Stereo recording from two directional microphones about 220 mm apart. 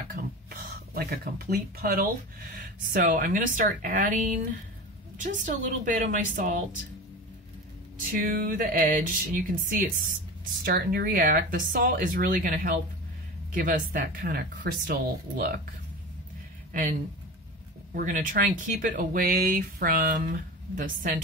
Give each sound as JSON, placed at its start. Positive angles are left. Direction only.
{"t": 0.1, "sound": "speech", "side_deg": -45}
{"t": 8.1, "sound": "speech", "side_deg": -40}
{"t": 17.9, "sound": "speech", "side_deg": -35}